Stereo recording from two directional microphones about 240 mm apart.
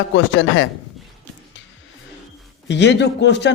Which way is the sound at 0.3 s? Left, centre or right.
Left.